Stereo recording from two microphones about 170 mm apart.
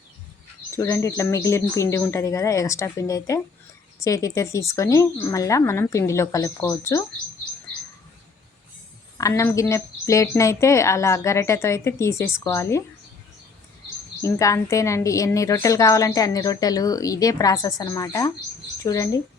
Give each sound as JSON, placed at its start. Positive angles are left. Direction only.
{"t": 0.8, "sound": "a woman's voice", "side_deg": 20}
{"t": 9.1, "sound": "a woman's voice", "side_deg": 20}
{"t": 14.2, "sound": "a woman's voice", "side_deg": 20}